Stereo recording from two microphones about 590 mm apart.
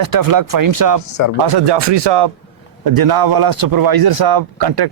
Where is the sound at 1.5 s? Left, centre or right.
Right.